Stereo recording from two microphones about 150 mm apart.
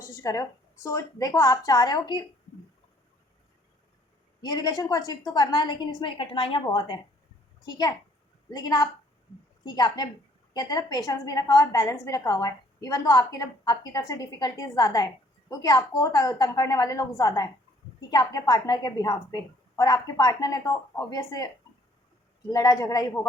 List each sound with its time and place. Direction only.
0.2 s a woman's voice: 20° left (ahead or behind)
4.4 s a woman's voice: 25° left (ahead or behind)
22.5 s a woman's voice: 20° left (ahead or behind)